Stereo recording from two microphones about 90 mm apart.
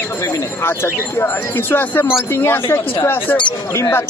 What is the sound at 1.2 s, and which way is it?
Speech, 25° left (ahead or behind).